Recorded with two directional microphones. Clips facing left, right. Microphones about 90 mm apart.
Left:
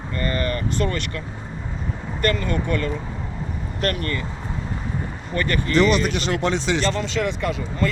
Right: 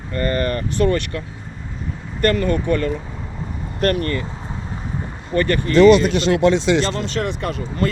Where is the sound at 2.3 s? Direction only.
45° right (ahead or behind).